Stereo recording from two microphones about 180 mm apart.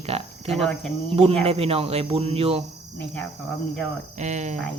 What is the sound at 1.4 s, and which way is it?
Speech, 35° right (ahead or behind).